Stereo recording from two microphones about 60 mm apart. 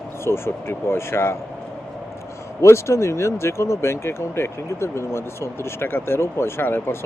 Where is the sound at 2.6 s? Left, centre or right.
Left.